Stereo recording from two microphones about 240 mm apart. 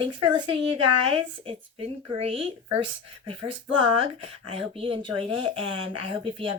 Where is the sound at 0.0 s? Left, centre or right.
Centre.